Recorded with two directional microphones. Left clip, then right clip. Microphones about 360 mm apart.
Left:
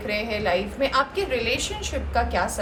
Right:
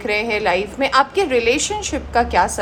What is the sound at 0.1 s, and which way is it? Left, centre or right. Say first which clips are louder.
A woman's voice: right 6 dB; centre.